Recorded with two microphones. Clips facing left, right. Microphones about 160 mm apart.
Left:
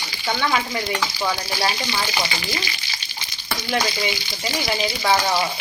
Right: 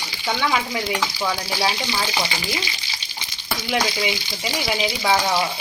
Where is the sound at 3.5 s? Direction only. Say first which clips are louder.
Even; centre (ahead or behind).